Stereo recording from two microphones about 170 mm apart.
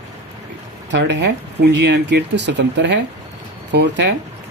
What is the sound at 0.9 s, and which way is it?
Speech, 90° right.